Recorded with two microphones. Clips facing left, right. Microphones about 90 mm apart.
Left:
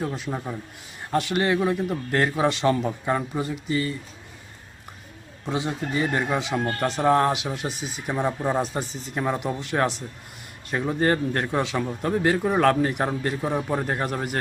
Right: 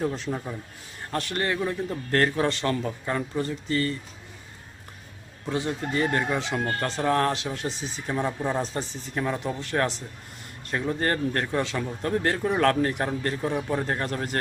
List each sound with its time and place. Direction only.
0.0 s a man's voice: 5° left (ahead or behind)
0.3 s speech: 15° left (ahead or behind)
5.5 s speech: 20° left (ahead or behind)